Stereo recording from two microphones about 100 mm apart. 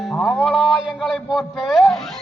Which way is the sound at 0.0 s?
Centre (ahead or behind).